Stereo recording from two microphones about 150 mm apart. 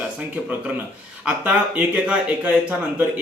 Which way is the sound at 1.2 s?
10° right (ahead or behind).